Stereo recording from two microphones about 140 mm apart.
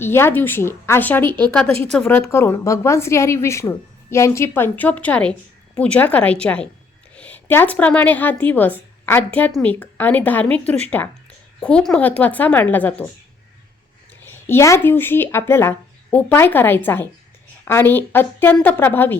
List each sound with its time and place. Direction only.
0.0 s a woman's voice: 15° left (ahead or behind)
14.3 s speech: 15° left (ahead or behind)